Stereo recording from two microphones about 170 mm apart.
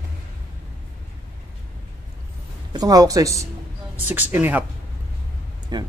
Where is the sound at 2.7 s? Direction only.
20° right (ahead or behind).